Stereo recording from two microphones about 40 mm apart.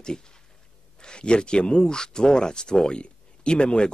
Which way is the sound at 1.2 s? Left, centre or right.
Left.